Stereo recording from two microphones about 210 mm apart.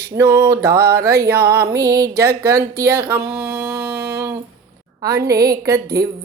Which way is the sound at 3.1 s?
10° right (ahead or behind).